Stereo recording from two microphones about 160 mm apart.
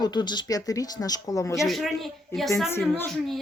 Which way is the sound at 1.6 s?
Centre (ahead or behind).